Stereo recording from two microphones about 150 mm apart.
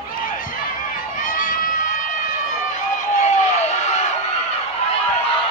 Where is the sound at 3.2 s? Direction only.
50° left (ahead or behind).